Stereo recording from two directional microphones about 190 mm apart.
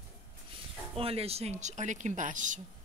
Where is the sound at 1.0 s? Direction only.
30° right (ahead or behind).